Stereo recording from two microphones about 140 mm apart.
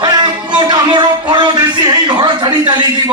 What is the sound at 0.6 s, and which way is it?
A man's voice, 30° right (ahead or behind).